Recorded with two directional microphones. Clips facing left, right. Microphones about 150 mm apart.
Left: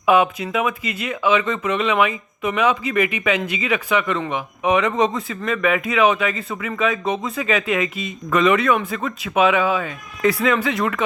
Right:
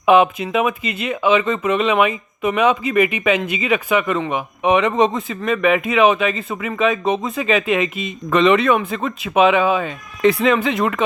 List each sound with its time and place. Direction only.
0.0 s speech: 20° right (ahead or behind)